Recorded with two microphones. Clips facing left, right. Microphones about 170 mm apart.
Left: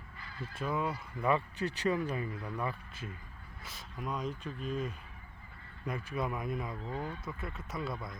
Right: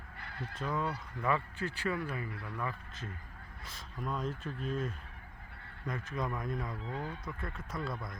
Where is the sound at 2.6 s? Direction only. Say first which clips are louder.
Left 2 dB; 15° left (ahead or behind).